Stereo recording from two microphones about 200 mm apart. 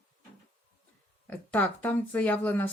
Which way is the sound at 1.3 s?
10° left (ahead or behind).